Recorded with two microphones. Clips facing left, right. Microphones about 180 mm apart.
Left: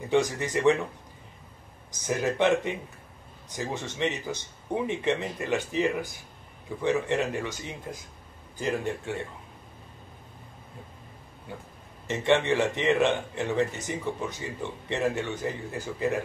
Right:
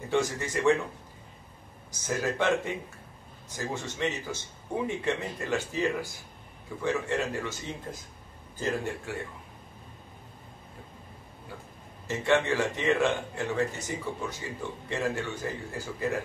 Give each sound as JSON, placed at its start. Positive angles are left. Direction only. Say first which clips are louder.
{"t": 0.1, "sound": "speech", "louder": "left 3 dB", "side_deg": 20}
{"t": 1.9, "sound": "speech", "louder": "left 2 dB", "side_deg": 20}
{"t": 12.1, "sound": "speech", "louder": "left 2 dB", "side_deg": 20}